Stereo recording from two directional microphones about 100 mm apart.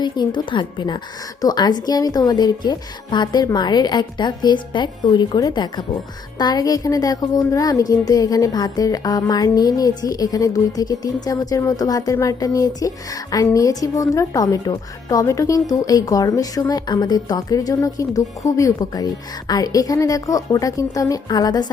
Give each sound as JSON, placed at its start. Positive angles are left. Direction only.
{"t": 0.0, "sound": "a woman's voice", "side_deg": 50}